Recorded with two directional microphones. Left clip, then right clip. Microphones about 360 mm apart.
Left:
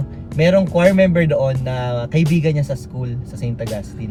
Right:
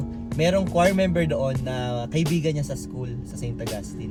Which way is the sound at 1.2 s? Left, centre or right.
Left.